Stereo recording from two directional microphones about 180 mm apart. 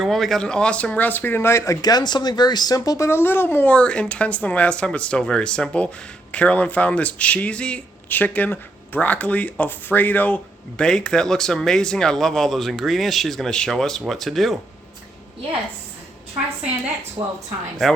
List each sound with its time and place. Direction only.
0.0 s speech: centre (ahead or behind)
17.2 s a woman's voice: 20° right (ahead or behind)